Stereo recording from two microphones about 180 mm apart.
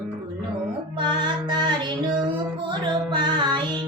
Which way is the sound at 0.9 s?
25° right (ahead or behind).